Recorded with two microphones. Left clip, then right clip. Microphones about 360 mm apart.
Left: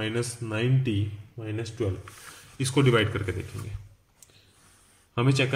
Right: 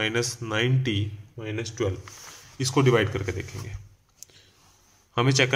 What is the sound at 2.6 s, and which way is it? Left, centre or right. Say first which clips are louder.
Speech: right 2 dB; centre.